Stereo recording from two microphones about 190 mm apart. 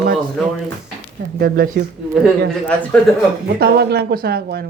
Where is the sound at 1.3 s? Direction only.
55° right (ahead or behind).